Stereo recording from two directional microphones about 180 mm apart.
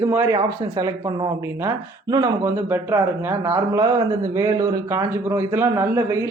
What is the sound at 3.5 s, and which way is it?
Speech, 20° right (ahead or behind).